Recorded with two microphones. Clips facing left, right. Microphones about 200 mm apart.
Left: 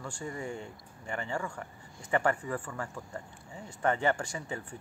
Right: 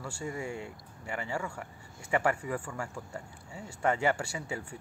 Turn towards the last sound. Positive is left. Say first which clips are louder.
# right 1 dB
turn(degrees=-10)  # may be behind; listen again after turning